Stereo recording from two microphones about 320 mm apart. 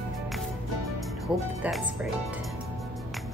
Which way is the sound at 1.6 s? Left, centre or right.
Centre.